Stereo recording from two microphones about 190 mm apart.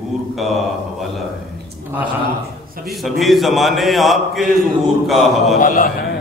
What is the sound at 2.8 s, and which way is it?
Mantra, centre (ahead or behind).